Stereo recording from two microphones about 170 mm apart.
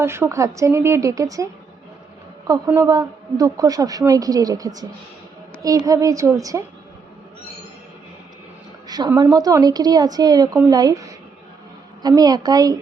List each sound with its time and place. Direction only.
0.0 s a woman's voice: 15° right (ahead or behind)
2.5 s a woman's voice: 15° right (ahead or behind)
8.9 s a woman's voice: 25° right (ahead or behind)